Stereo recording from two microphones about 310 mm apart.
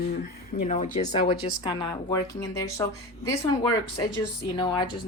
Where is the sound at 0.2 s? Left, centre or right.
Left; by 2.8 s centre.